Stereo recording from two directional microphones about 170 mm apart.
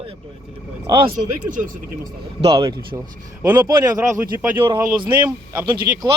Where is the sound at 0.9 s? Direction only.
30° right (ahead or behind).